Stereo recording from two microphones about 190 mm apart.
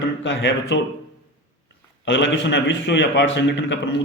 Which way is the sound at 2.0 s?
70° left (ahead or behind).